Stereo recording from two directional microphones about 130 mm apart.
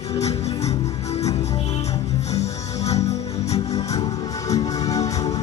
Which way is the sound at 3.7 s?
30° left (ahead or behind).